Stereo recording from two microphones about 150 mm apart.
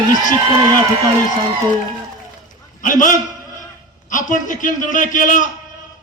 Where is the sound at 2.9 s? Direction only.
60° left (ahead or behind).